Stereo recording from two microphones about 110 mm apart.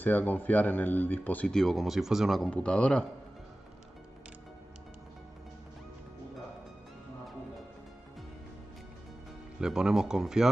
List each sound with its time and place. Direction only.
0.0 s a man's voice: 15° left (ahead or behind)
9.6 s speech: 5° right (ahead or behind)